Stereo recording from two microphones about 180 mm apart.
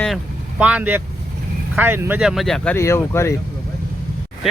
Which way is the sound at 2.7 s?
15° left (ahead or behind).